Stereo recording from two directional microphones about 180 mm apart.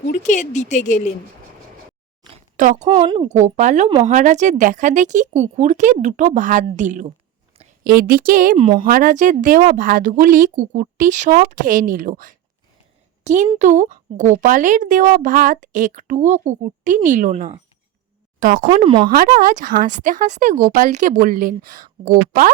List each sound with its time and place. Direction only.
0.1 s speech: 45° left (ahead or behind)
2.6 s speech: 45° right (ahead or behind)
3.0 s speech: 35° right (ahead or behind)
7.9 s speech: 55° right (ahead or behind)
8.5 s speech: 30° right (ahead or behind)
8.8 s a woman's voice: 50° right (ahead or behind)
18.6 s speech: 30° right (ahead or behind)
19.1 s speech: 55° right (ahead or behind)